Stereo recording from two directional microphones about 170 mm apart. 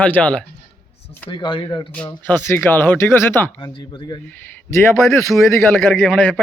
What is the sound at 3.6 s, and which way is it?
Speech, 25° left (ahead or behind).